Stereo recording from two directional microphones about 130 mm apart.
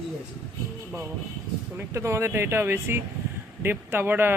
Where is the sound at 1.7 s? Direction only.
20° right (ahead or behind).